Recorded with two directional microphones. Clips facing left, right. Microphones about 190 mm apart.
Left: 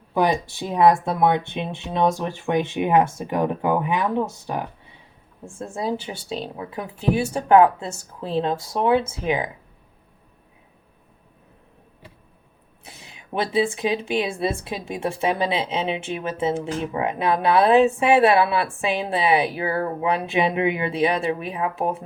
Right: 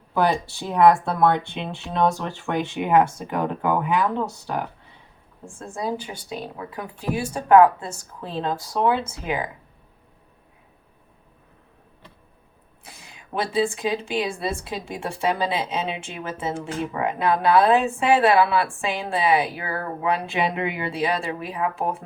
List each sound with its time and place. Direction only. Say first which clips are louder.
0.1 s speech: left 1 dB; 15° left (ahead or behind)
12.8 s speech: left 1 dB; 20° left (ahead or behind)